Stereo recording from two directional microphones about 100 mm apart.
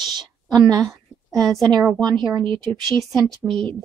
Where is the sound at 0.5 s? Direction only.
40° right (ahead or behind).